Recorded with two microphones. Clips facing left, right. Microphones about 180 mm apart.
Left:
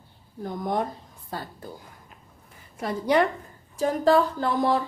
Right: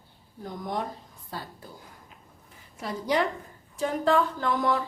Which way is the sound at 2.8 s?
55° left (ahead or behind).